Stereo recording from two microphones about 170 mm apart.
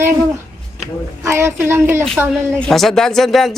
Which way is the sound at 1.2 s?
15° right (ahead or behind).